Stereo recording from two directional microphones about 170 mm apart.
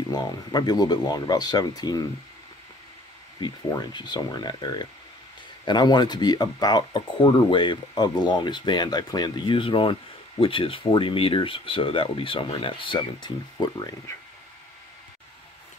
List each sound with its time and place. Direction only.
0.1 s speech: 25° left (ahead or behind)
3.3 s speech: 25° left (ahead or behind)